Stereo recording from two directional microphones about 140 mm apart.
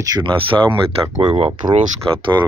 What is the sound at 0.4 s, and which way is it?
Speech, 40° right (ahead or behind).